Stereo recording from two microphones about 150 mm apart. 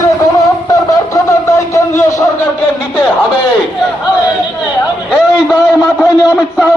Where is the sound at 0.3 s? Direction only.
20° left (ahead or behind).